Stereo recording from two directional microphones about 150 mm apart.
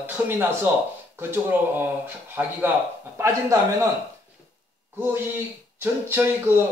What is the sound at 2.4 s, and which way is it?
A man's voice, 10° right (ahead or behind).